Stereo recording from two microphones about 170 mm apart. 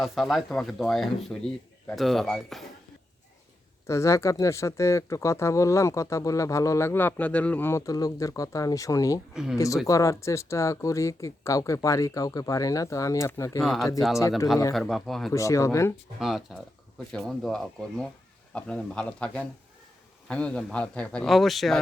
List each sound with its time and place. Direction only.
0.0 s a man's voice: centre (ahead or behind)
3.8 s speech: 15° left (ahead or behind)
9.3 s speech: 5° right (ahead or behind)
9.8 s speech: 20° left (ahead or behind)
13.6 s a man's voice: centre (ahead or behind)
15.3 s speech: 20° left (ahead or behind)
16.2 s a man's voice: centre (ahead or behind)